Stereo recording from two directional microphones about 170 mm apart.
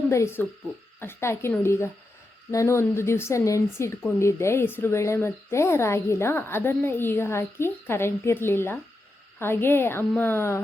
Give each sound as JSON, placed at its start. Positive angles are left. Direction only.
{"t": 0.1, "sound": "a woman's voice", "side_deg": 15}